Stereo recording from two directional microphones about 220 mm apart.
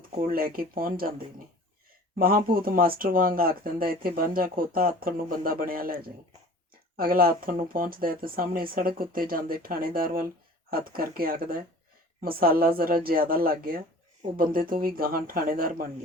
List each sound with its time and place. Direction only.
0.2 s speech: 40° right (ahead or behind)
2.1 s speech: 40° right (ahead or behind)